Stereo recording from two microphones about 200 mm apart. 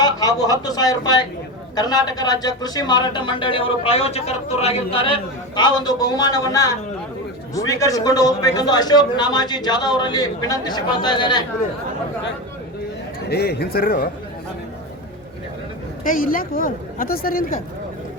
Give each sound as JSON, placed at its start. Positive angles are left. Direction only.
{"t": 0.0, "sound": "a sound", "side_deg": 20}
{"t": 0.6, "sound": "speech", "side_deg": 20}
{"t": 13.3, "sound": "speech", "side_deg": 55}
{"t": 16.0, "sound": "speech", "side_deg": 45}